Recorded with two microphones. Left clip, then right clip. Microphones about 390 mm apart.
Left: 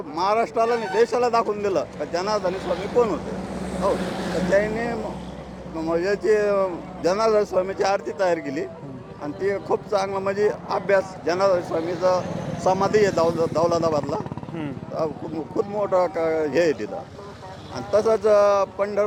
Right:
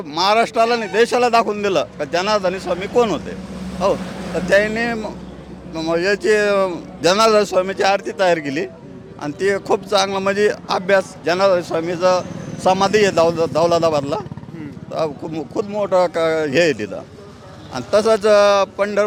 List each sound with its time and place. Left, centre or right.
0.1 s speech: right
4.5 s speech: right
15.5 s speech: right